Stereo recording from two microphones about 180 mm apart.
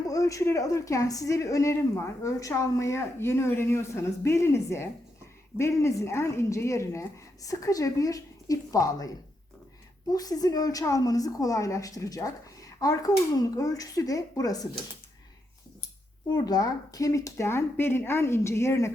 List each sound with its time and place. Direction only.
0.1 s a woman's voice: 20° left (ahead or behind)
16.3 s speech: 20° left (ahead or behind)